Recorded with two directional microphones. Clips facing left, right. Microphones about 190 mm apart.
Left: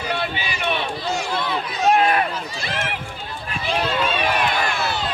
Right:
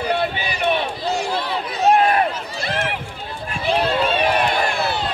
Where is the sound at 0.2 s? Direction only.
45° right (ahead or behind).